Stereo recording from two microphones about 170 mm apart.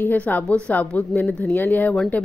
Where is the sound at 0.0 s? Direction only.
10° left (ahead or behind).